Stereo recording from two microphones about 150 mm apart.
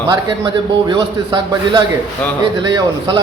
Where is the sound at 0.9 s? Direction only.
30° right (ahead or behind).